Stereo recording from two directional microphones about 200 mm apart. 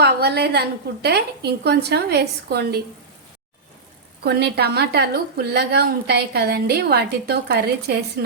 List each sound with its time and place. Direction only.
0.0 s a woman's voice: 55° right (ahead or behind)
4.2 s a woman's voice: 55° right (ahead or behind)